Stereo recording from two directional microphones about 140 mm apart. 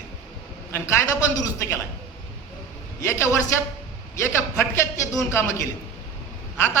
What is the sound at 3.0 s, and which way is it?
Speech, 20° left (ahead or behind).